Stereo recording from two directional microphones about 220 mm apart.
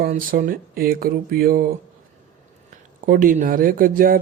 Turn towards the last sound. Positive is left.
turn(degrees=-40)  # may be behind; listen again after turning